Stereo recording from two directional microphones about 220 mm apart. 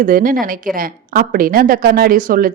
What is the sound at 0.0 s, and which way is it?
A woman's voice, 40° right (ahead or behind).